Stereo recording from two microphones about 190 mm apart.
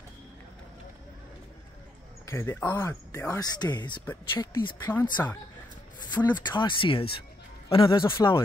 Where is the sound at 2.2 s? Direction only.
15° left (ahead or behind).